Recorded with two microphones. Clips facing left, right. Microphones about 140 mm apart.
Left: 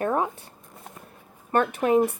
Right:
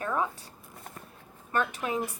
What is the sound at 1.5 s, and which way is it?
Speech, 50° left (ahead or behind).